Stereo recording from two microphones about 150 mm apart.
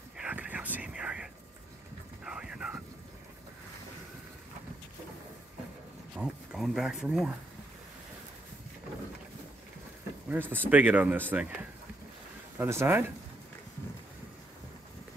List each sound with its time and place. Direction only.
0.2 s a sound: 10° right (ahead or behind)
6.1 s speech: 5° right (ahead or behind)
10.2 s speech: 10° right (ahead or behind)